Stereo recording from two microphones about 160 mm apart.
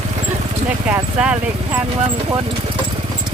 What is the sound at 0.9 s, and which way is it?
Speech, 10° right (ahead or behind).